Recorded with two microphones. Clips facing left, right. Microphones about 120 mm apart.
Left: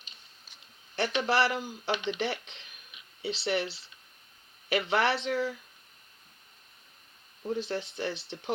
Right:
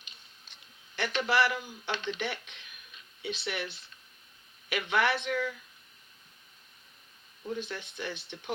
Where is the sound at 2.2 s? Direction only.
35° left (ahead or behind).